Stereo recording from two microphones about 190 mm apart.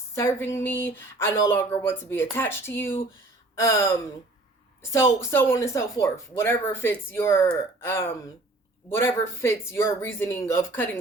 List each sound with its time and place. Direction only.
0.1 s speech: 15° left (ahead or behind)